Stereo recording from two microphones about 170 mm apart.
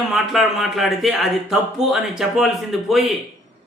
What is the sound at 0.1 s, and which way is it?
A man's voice, centre (ahead or behind).